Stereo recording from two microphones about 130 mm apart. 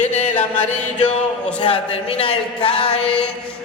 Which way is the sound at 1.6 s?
45° left (ahead or behind).